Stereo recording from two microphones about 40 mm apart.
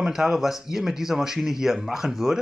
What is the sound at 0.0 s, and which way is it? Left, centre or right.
A man's voice, centre.